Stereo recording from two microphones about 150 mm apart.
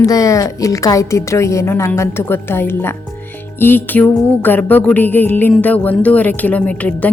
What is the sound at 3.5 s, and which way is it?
Music, 15° left (ahead or behind).